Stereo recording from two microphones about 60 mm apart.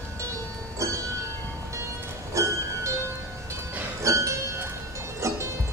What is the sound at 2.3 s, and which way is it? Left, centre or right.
Music, right.